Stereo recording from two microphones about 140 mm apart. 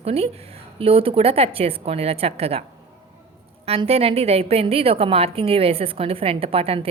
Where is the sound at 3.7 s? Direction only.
45° right (ahead or behind).